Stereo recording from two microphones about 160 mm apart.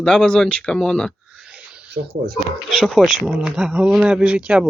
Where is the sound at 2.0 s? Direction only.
90° right.